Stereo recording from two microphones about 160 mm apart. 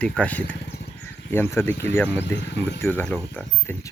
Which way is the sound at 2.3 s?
90° left.